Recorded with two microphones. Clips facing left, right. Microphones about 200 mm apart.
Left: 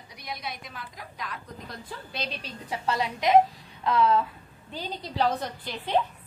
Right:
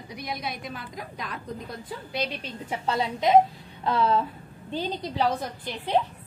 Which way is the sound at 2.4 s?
25° right (ahead or behind).